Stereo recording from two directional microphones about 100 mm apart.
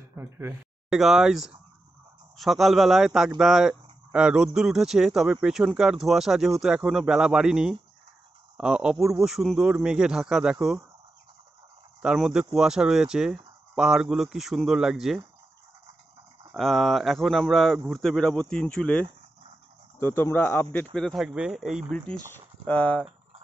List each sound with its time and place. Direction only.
0.1 s speech: 25° right (ahead or behind)
0.8 s speech: 5° right (ahead or behind)
12.0 s speech: 5° right (ahead or behind)
16.5 s speech: centre (ahead or behind)
20.0 s speech: 25° left (ahead or behind)
20.9 s speech: centre (ahead or behind)
21.9 s speech: 10° left (ahead or behind)